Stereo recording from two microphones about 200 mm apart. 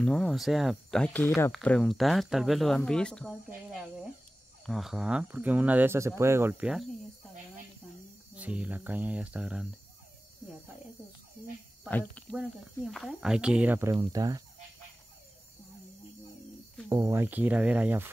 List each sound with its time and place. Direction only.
0.0 s speech: centre (ahead or behind)
4.6 s speech: centre (ahead or behind)
8.4 s speech: 5° right (ahead or behind)
12.1 s speech: 5° left (ahead or behind); by 14.4 s 20° right (ahead or behind)
16.9 s speech: 15° right (ahead or behind)